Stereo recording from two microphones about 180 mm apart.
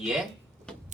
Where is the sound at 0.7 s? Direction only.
5° left (ahead or behind).